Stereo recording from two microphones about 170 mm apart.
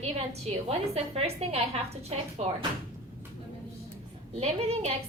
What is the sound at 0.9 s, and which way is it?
A woman's voice, 35° right (ahead or behind).